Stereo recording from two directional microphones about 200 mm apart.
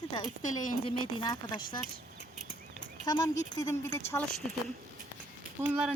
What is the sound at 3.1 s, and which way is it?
Speech, 20° left (ahead or behind).